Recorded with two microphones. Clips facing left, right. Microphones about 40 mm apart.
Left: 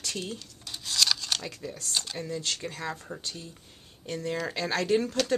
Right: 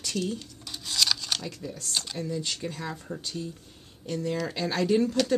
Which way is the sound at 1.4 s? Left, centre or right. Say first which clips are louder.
Right 1 dB; centre.